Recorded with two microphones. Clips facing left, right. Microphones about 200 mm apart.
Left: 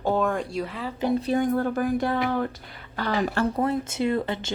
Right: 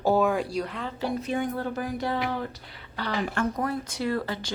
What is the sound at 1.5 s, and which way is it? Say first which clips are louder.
Speech: left 7 dB; 50° left (ahead or behind).